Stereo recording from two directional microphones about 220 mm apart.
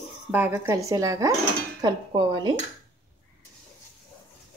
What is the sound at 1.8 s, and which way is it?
Dishes, 20° right (ahead or behind).